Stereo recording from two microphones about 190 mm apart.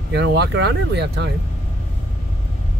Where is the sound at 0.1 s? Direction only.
60° right (ahead or behind).